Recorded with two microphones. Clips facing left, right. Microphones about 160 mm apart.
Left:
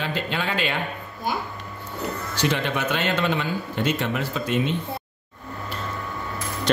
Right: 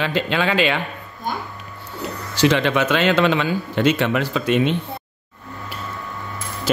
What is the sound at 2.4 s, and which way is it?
Speech, 90° right.